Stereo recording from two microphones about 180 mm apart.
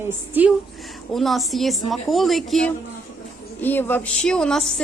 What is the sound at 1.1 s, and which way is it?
A woman's voice, centre (ahead or behind).